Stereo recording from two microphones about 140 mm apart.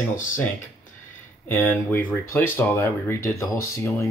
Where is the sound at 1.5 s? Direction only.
15° left (ahead or behind).